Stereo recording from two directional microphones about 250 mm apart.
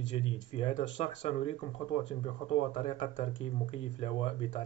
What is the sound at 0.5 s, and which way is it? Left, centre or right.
Speech, left.